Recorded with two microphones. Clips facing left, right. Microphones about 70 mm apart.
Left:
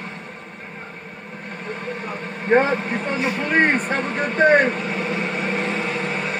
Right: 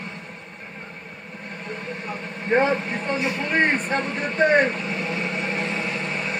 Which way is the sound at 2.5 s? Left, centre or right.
Left.